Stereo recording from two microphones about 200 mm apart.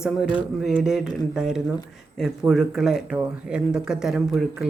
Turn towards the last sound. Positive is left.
turn(degrees=-5)  # may be behind; listen again after turning